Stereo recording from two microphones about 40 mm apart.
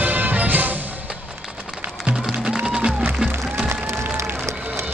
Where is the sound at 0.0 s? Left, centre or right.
Right.